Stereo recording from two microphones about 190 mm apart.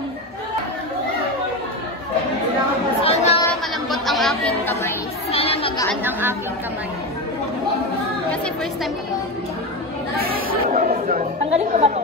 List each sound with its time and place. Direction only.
3.0 s chatter: 30° left (ahead or behind)
3.9 s chatter: centre (ahead or behind)
5.3 s chatter: 30° left (ahead or behind)
10.1 s speech: 45° right (ahead or behind)